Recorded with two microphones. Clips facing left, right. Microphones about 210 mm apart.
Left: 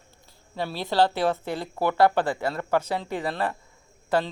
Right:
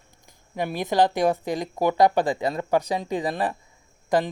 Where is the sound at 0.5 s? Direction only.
15° right (ahead or behind).